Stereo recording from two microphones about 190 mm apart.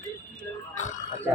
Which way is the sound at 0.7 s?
40° left (ahead or behind).